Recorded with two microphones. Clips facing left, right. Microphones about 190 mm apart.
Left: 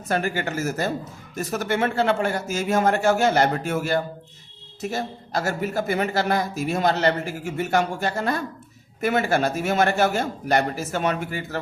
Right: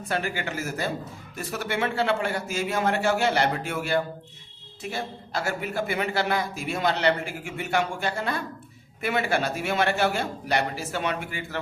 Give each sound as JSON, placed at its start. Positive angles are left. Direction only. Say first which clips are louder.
{"t": 0.1, "sound": "a man's voice", "louder": "left 5 dB", "side_deg": 45}